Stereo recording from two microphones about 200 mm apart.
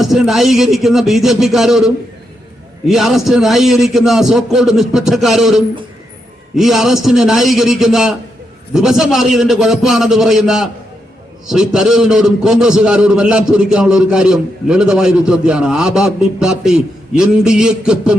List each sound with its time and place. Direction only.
0.0 s a man's voice: centre (ahead or behind)